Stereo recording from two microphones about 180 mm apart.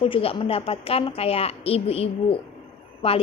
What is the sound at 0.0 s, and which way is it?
A woman's voice, 30° left (ahead or behind).